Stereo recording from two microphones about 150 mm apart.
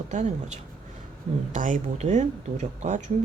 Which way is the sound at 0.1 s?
50° right (ahead or behind).